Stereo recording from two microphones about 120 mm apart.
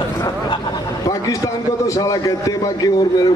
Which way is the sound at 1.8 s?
30° left (ahead or behind).